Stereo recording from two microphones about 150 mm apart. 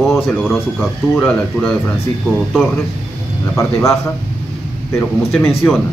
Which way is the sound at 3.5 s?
20° left (ahead or behind).